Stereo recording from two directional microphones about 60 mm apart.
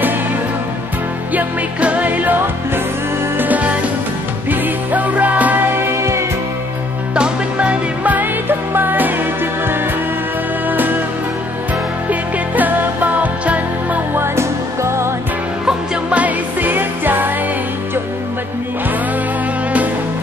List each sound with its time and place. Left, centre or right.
1.3 s music: right
5.8 s music: right
7.2 s music: centre
12.1 s music: right
14.1 s music: right
16.1 s music: right